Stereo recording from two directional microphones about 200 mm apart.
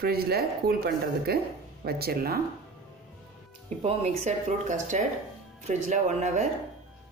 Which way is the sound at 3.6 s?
35° right (ahead or behind).